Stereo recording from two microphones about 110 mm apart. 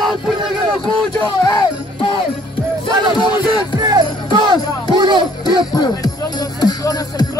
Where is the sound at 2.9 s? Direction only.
45° right (ahead or behind).